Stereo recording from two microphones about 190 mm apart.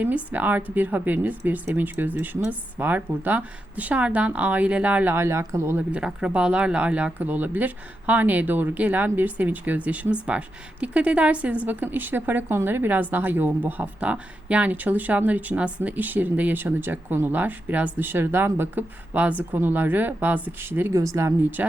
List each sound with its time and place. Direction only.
0.0 s speech: 10° right (ahead or behind)